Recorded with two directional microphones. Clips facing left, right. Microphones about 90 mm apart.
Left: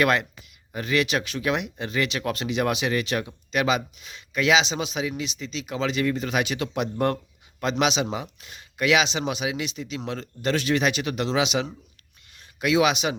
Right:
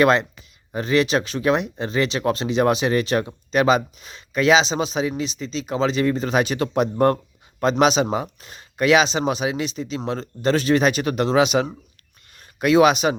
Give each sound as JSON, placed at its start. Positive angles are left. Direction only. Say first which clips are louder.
{"t": 0.0, "sound": "speech", "louder": "right 5 dB", "side_deg": -30}